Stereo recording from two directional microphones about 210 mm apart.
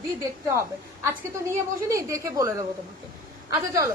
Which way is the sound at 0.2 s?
15° right (ahead or behind).